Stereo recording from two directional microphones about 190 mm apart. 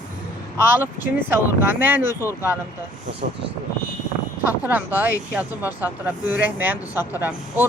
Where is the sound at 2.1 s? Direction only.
15° left (ahead or behind).